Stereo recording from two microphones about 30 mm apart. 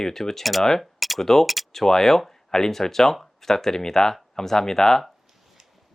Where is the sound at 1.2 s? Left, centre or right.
Centre.